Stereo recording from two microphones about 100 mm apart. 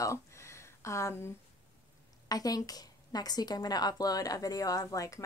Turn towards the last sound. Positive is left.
turn(degrees=35)  # may be behind; listen again after turning